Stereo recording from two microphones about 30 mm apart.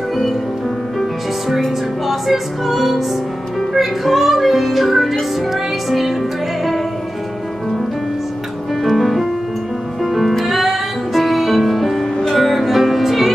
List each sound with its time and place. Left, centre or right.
2.0 s music: centre
8.8 s music: centre